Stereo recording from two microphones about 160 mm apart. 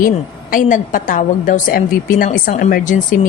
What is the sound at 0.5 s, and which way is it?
A woman's voice, 55° left (ahead or behind).